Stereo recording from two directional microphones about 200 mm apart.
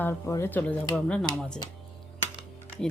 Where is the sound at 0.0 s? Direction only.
15° left (ahead or behind).